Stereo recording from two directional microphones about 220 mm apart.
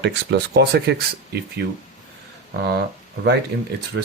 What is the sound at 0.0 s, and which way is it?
Speech, 50° right (ahead or behind).